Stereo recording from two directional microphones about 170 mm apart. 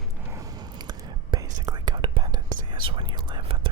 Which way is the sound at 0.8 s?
20° right (ahead or behind).